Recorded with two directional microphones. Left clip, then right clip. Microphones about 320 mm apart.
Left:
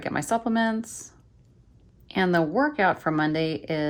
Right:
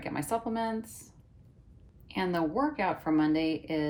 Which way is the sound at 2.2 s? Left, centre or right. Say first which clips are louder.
Left 7 dB; left.